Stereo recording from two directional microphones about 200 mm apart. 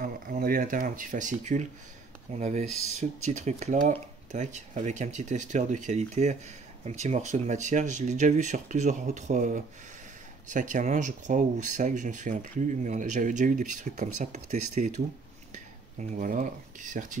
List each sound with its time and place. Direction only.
0.0 s speech: 45° right (ahead or behind)